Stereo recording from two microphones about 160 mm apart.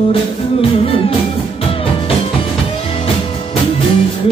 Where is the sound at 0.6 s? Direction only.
35° left (ahead or behind).